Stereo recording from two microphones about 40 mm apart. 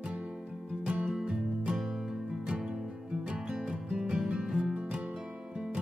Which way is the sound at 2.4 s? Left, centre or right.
Centre.